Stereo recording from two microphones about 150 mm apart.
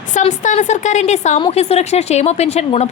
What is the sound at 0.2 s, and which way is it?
A woman's voice, 55° left (ahead or behind).